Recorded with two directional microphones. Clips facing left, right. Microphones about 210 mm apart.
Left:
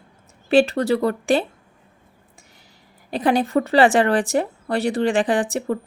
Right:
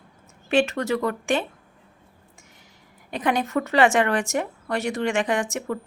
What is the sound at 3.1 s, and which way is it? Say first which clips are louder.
Speech: left 5 dB; 35° left (ahead or behind).